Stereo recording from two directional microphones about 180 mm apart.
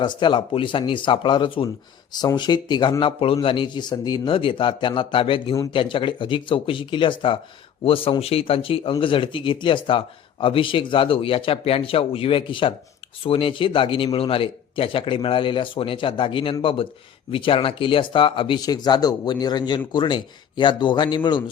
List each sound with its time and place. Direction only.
0.0 s speech: 25° left (ahead or behind)